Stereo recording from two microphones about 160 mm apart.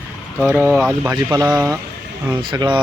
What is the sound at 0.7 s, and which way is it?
Speech, centre (ahead or behind).